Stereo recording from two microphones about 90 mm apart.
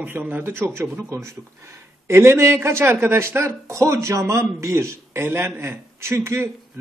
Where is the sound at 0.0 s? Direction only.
20° right (ahead or behind).